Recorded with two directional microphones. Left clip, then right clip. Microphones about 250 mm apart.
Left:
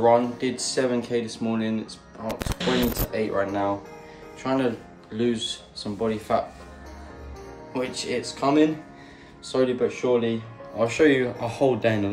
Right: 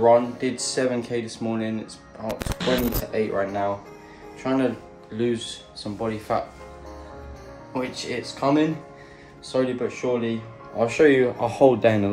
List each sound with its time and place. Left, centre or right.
0.0 s speech: centre
7.7 s speech: centre
10.8 s a man's voice: centre